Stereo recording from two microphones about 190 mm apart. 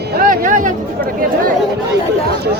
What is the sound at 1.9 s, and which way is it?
Speech, 60° right (ahead or behind).